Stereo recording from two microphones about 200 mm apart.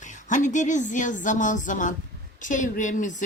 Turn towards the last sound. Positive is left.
turn(degrees=40)  # may be behind; listen again after turning